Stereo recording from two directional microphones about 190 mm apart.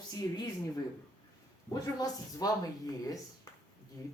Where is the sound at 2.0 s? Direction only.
20° left (ahead or behind).